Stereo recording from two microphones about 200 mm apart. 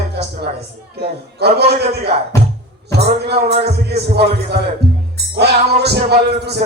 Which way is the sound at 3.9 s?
55° right (ahead or behind).